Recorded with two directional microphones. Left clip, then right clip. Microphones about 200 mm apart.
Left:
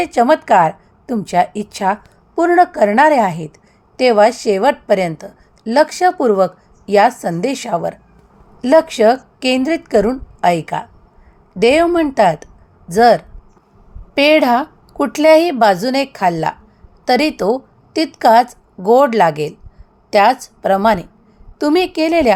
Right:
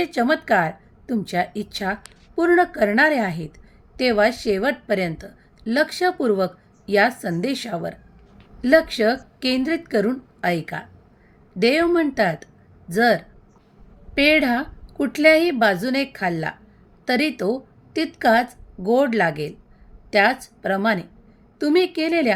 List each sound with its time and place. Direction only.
0.0 s a woman's voice: 10° left (ahead or behind)